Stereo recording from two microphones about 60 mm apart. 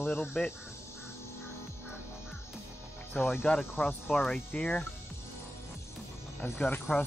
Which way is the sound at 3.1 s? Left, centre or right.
Left.